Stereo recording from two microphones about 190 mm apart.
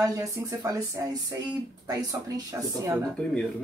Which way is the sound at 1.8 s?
15° right (ahead or behind).